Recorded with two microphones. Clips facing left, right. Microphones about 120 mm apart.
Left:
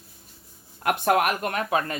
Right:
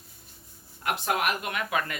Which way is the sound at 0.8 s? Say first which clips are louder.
Left 6 dB; 50° left (ahead or behind).